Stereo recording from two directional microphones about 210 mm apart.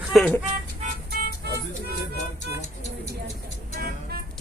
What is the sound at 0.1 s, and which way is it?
Music, 5° left (ahead or behind).